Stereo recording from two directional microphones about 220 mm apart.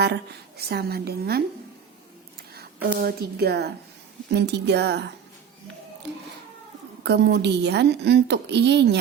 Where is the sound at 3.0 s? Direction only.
45° right (ahead or behind).